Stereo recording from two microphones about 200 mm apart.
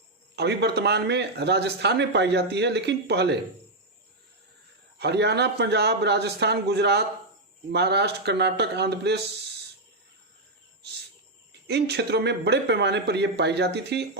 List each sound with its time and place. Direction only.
0.3 s speech: 55° right (ahead or behind)
4.9 s speech: 55° right (ahead or behind)
11.7 s speech: 55° right (ahead or behind)